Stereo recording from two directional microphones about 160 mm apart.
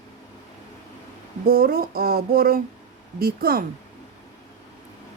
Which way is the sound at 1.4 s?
70° right (ahead or behind).